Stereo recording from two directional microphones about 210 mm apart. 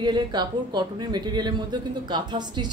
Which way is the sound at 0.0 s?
20° right (ahead or behind).